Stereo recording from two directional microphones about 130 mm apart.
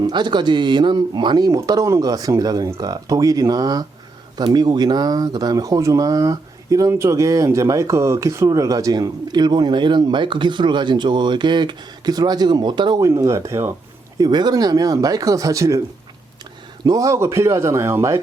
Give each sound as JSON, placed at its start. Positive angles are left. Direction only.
{"t": 0.0, "sound": "speech", "side_deg": -35}
{"t": 13.0, "sound": "speech", "side_deg": -20}
{"t": 14.2, "sound": "speech", "side_deg": -35}
{"t": 16.8, "sound": "speech", "side_deg": -25}